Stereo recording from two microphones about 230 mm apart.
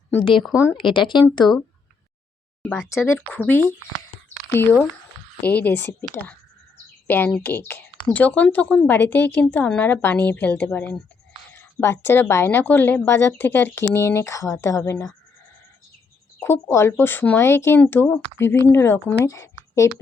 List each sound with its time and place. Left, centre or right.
0.2 s a woman's voice: left
2.6 s speech: centre
16.4 s speech: centre
19.2 s a sound: centre